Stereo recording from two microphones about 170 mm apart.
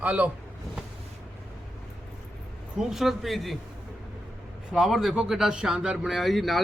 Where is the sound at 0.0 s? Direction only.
10° right (ahead or behind).